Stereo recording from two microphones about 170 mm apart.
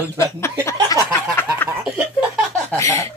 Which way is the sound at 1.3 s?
10° left (ahead or behind).